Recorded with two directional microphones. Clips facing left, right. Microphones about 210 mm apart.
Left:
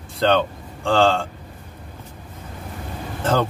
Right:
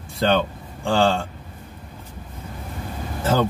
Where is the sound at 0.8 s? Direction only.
10° right (ahead or behind).